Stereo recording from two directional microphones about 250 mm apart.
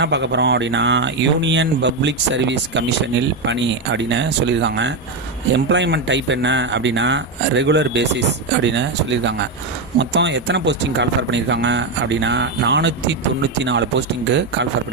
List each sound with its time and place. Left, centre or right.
0.0 s speech: right